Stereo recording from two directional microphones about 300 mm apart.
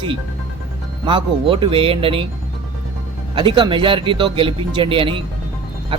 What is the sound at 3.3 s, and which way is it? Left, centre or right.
Speech, centre.